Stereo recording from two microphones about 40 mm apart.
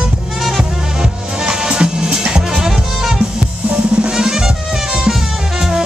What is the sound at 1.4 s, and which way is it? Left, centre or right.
Music, right.